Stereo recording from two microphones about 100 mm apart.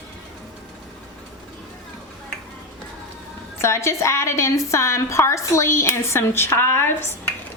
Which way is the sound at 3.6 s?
25° left (ahead or behind).